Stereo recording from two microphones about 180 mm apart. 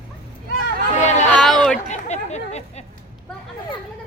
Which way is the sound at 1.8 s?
40° left (ahead or behind).